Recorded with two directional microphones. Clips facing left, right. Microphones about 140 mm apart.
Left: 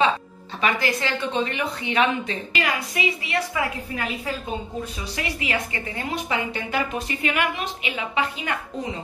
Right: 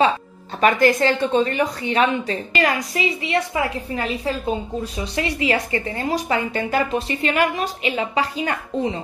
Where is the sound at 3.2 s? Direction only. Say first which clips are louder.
Right 4 dB; 30° right (ahead or behind).